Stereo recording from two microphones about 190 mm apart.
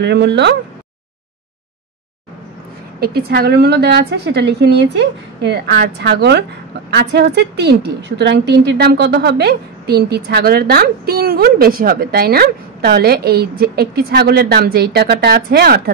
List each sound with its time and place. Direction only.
0.0 s a woman's voice: 65° right (ahead or behind)
3.0 s a woman's voice: 55° right (ahead or behind)